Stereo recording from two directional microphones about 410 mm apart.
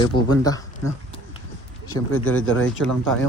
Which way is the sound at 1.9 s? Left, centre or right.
Centre.